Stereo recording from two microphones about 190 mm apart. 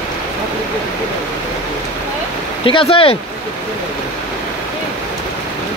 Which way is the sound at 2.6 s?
25° left (ahead or behind).